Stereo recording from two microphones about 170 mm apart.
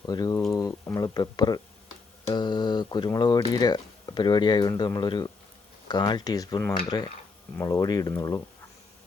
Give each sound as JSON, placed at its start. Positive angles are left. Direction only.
{"t": 0.0, "sound": "speech", "side_deg": 20}